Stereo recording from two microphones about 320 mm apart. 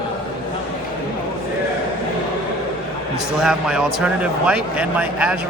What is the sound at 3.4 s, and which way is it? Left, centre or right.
Speech, centre.